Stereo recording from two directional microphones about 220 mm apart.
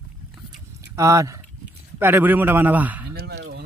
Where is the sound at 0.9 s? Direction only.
15° right (ahead or behind).